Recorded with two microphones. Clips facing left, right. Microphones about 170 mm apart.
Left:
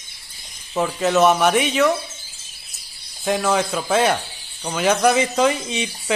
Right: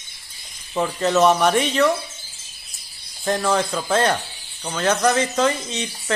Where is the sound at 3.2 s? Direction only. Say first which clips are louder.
Left 1 dB; 5° left (ahead or behind).